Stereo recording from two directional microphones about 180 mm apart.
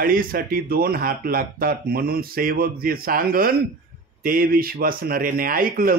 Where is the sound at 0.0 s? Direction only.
55° right (ahead or behind).